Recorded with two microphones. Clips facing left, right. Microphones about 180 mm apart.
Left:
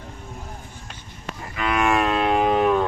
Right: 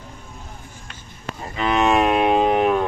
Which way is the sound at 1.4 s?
25° right (ahead or behind).